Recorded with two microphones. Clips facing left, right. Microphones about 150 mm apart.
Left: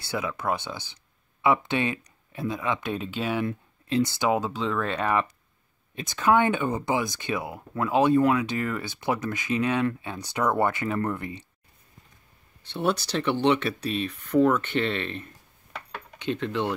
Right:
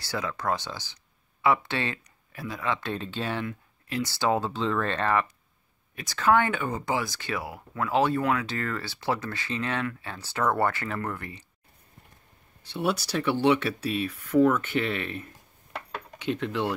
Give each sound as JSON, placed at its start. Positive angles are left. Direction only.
{"t": 0.4, "sound": "speech", "side_deg": 20}
{"t": 3.4, "sound": "speech", "side_deg": 25}
{"t": 12.6, "sound": "speech", "side_deg": -10}